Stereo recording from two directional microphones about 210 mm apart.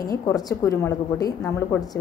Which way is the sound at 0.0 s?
15° left (ahead or behind).